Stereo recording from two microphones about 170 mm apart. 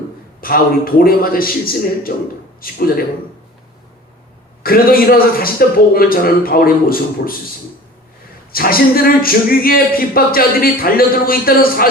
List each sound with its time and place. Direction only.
0.4 s speech: 60° left (ahead or behind)
4.6 s speech: 60° left (ahead or behind)
8.5 s speech: 60° left (ahead or behind)